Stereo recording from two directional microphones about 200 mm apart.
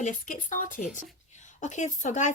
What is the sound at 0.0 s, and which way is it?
A woman's voice, 40° left (ahead or behind).